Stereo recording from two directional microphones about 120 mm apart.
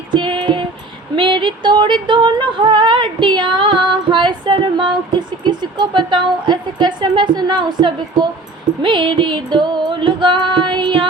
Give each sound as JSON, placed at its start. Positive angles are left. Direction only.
{"t": 0.1, "sound": "music", "side_deg": -40}
{"t": 1.1, "sound": "a sound", "side_deg": -40}
{"t": 5.5, "sound": "a woman's voice", "side_deg": -40}